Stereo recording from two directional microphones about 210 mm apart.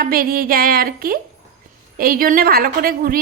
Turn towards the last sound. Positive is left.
turn(degrees=-45)  # may be behind; listen again after turning